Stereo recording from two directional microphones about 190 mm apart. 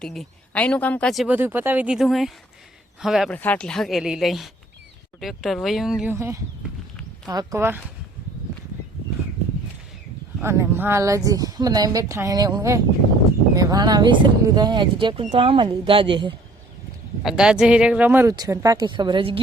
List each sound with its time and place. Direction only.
0.0 s speech: centre (ahead or behind)
3.3 s speech: 10° left (ahead or behind)
6.1 s speech: 15° right (ahead or behind)
10.4 s speech: 15° right (ahead or behind)
17.2 s speech: 5° right (ahead or behind); by 19.4 s 25° right (ahead or behind)